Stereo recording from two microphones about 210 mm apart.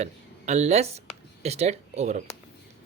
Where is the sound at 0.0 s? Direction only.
35° right (ahead or behind).